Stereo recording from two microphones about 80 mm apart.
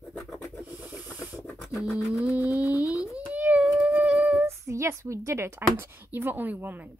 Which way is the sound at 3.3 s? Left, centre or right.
Centre.